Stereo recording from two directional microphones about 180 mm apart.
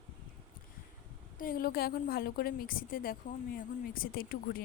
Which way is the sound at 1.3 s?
50° left (ahead or behind).